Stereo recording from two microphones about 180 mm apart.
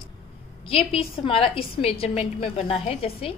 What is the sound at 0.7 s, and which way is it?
A woman's voice, 30° left (ahead or behind).